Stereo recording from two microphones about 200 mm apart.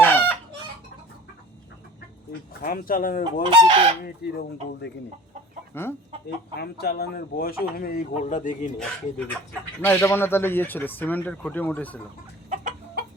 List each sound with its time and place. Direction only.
0.0 s chicken: 10° left (ahead or behind)
2.5 s speech: 45° left (ahead or behind)
3.5 s chicken: 25° right (ahead or behind)
5.7 s speech: 10° left (ahead or behind)
6.6 s speech: 50° left (ahead or behind)
9.1 s speech: 10° left (ahead or behind)
12.5 s chicken: 40° right (ahead or behind)